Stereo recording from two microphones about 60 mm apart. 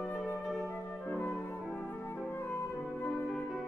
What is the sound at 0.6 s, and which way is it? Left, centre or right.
Music, left.